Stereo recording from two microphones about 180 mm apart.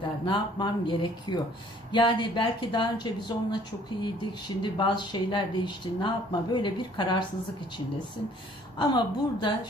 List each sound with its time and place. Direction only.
0.3 s speech: 25° left (ahead or behind)
8.8 s speech: 25° left (ahead or behind)